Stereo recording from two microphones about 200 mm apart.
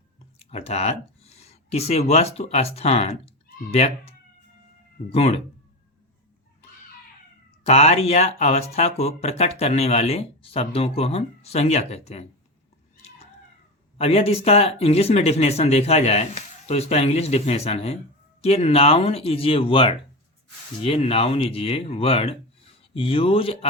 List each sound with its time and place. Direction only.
0.3 s speech: 30° left (ahead or behind)
5.1 s speech: 30° left (ahead or behind)
7.6 s speech: 30° left (ahead or behind)
14.0 s speech: 30° left (ahead or behind)